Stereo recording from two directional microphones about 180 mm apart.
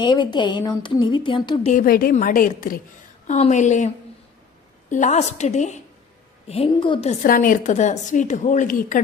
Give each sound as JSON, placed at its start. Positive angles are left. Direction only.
{"t": 0.0, "sound": "a woman's voice", "side_deg": 25}
{"t": 1.7, "sound": "a woman's voice", "side_deg": 50}
{"t": 3.2, "sound": "a woman's voice", "side_deg": 40}
{"t": 7.1, "sound": "a woman's voice", "side_deg": 45}